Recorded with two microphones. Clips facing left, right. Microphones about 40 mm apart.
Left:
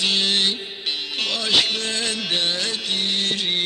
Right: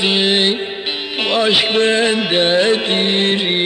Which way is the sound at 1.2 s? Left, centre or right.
Right.